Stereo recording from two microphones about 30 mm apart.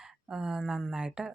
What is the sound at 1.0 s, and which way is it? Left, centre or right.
Speech, right.